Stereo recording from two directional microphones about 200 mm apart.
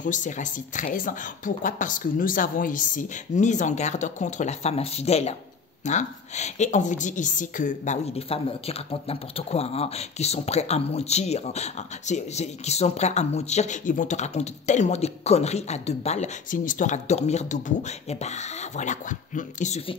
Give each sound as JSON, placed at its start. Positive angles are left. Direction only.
{"t": 0.0, "sound": "a woman's voice", "side_deg": 40}